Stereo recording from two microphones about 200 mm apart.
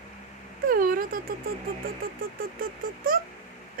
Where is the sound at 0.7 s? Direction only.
45° right (ahead or behind).